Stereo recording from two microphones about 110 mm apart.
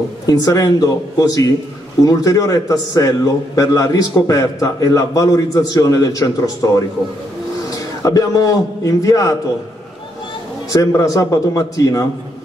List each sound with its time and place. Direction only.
0.3 s a man's voice: 35° left (ahead or behind)
8.0 s a man's voice: 30° left (ahead or behind)
10.7 s a man's voice: 30° left (ahead or behind)